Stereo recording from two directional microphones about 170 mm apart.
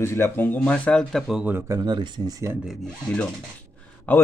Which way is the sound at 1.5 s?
15° right (ahead or behind).